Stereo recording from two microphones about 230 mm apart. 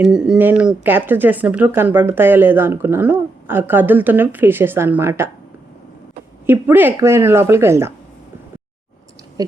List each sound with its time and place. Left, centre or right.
0.0 s speech: centre
6.4 s speech: centre
9.4 s speech: centre